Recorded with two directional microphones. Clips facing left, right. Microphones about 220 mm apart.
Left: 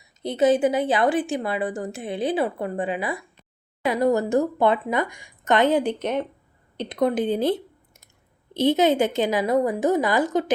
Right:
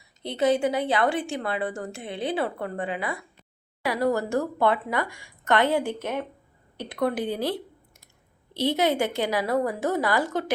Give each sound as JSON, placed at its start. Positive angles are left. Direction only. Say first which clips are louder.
{"t": 0.3, "sound": "speech", "louder": "left 4 dB", "side_deg": 20}